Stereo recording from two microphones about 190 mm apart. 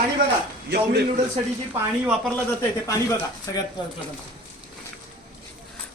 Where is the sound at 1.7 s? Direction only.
5° right (ahead or behind).